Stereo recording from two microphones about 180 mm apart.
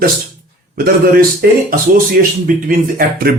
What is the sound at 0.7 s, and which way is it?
Speech, 55° right (ahead or behind).